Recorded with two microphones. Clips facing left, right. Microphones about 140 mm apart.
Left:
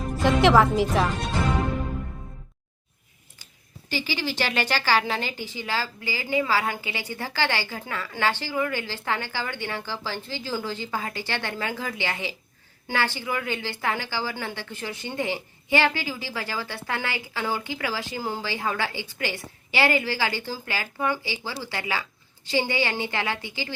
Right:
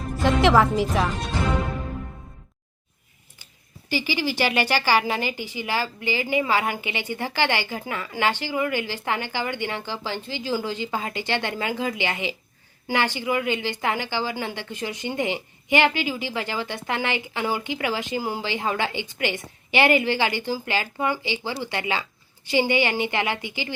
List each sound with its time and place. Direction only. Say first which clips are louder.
0.2 s a woman's voice: even; centre (ahead or behind)
3.8 s a woman's voice: right 3 dB; 15° right (ahead or behind)